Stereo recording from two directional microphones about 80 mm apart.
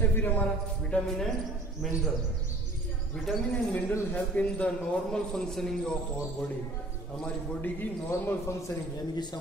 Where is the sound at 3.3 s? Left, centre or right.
Centre.